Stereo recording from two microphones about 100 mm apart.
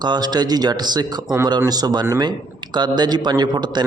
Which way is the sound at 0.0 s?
45° right (ahead or behind).